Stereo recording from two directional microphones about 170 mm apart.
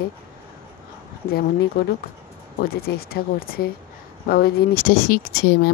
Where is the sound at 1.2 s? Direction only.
65° left (ahead or behind).